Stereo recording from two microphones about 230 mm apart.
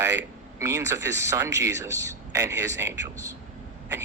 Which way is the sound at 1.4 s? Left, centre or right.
Right.